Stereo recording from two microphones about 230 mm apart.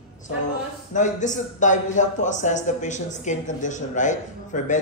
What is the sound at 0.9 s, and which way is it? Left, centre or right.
A man's voice, left.